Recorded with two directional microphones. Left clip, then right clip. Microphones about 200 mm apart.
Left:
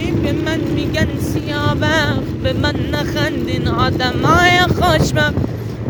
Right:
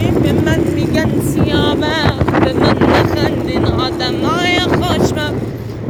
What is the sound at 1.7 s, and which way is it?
Wind noise, 25° left (ahead or behind).